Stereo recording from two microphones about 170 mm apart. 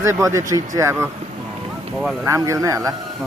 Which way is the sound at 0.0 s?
15° right (ahead or behind).